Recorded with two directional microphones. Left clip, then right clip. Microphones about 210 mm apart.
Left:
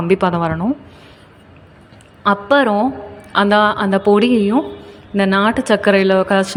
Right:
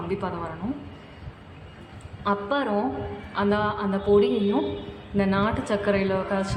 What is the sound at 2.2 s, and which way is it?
A woman's voice, 35° left (ahead or behind).